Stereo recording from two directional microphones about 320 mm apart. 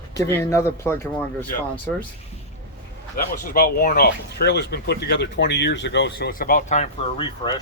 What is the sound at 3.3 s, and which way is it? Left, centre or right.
A man's voice, left.